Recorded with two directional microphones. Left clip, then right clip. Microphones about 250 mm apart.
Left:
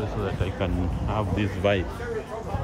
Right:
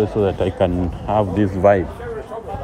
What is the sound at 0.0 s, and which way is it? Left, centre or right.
Speech, right.